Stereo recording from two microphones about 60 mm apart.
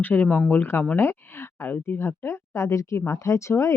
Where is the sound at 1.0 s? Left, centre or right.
Left.